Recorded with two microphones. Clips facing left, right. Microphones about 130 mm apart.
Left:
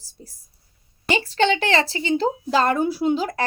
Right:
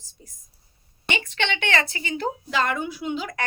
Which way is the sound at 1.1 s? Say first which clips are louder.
Left 8 dB; 35° left (ahead or behind).